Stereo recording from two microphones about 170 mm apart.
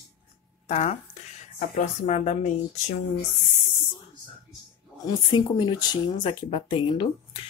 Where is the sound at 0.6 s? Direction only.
40° left (ahead or behind).